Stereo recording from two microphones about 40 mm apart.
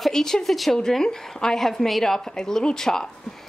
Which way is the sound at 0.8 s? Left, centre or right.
Centre.